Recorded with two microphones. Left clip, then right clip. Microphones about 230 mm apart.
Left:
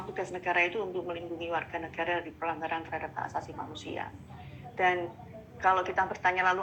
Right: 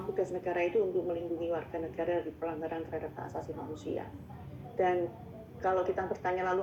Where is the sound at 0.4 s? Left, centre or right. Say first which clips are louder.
Left 4 dB; left.